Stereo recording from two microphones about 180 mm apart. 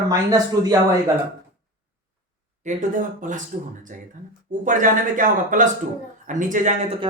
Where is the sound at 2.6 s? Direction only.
45° right (ahead or behind).